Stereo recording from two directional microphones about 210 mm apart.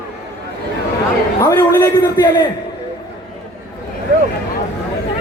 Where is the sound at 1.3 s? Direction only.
15° left (ahead or behind).